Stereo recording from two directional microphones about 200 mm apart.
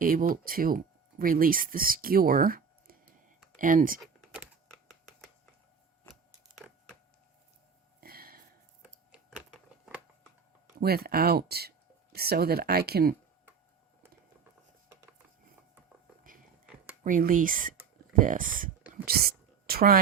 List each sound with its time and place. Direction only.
0.0 s speech: 45° right (ahead or behind)
4.9 s finger snapping: 5° left (ahead or behind)
8.0 s a sound: 50° right (ahead or behind)
8.8 s a sound: 5° right (ahead or behind)
10.8 s speech: 50° right (ahead or behind)
17.0 s speech: 40° right (ahead or behind)